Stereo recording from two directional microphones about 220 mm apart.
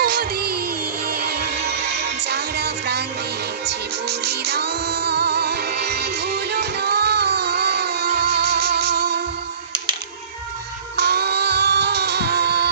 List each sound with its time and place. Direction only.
0.0 s music: 45° right (ahead or behind)
10.9 s music: 50° right (ahead or behind)